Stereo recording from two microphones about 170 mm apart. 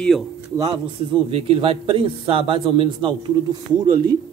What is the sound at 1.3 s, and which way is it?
A man's voice, 35° right (ahead or behind).